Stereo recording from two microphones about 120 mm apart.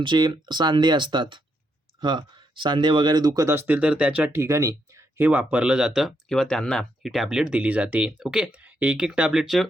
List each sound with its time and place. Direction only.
0.0 s speech: 40° right (ahead or behind); by 4.3 s 10° right (ahead or behind)
4.4 s speech: 25° right (ahead or behind)
5.3 s speech: 10° right (ahead or behind)